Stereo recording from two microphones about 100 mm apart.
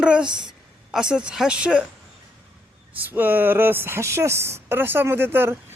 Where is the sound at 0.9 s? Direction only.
5° right (ahead or behind).